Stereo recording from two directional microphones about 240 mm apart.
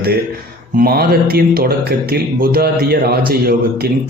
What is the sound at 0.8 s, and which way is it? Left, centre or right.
Speech, right.